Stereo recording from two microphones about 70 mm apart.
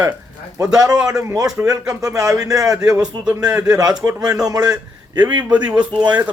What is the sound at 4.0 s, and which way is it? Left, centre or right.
Speech, right.